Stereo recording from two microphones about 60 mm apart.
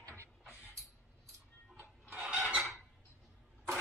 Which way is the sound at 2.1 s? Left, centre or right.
Centre.